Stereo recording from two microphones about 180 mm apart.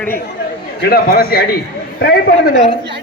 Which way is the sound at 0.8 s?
60° left (ahead or behind).